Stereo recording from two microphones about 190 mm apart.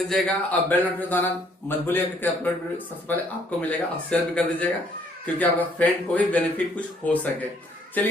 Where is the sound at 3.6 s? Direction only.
5° left (ahead or behind).